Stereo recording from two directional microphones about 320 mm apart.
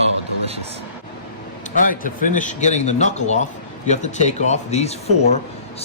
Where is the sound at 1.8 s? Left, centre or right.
Left.